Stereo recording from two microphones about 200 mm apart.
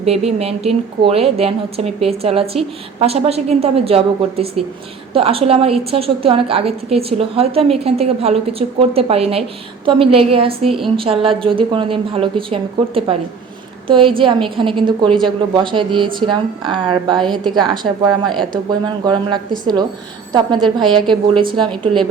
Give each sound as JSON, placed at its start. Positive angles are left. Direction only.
{"t": 0.0, "sound": "a woman's voice", "side_deg": -30}
{"t": 18.5, "sound": "a woman's voice", "side_deg": -20}